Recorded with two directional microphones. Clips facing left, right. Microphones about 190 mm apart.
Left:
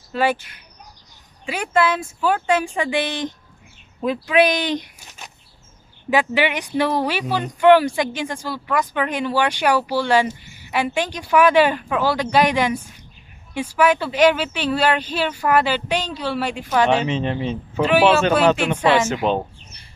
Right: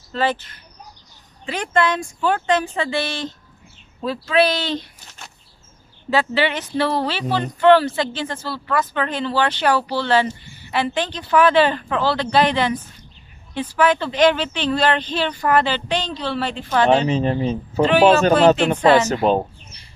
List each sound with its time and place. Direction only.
0.1 s speech: 10° left (ahead or behind)
17.1 s a man's voice: 40° right (ahead or behind)